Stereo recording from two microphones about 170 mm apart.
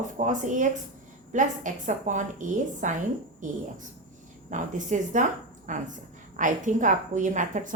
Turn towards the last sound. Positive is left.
turn(degrees=-45)  # may be behind; listen again after turning